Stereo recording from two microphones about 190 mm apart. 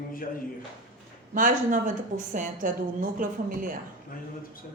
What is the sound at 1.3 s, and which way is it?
A woman's voice, 45° right (ahead or behind).